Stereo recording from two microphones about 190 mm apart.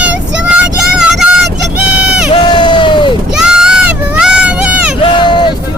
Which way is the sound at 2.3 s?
25° left (ahead or behind).